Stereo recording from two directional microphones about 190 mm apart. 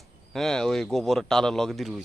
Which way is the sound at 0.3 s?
Centre (ahead or behind).